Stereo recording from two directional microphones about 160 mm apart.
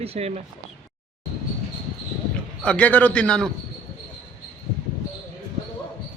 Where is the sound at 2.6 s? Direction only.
10° left (ahead or behind).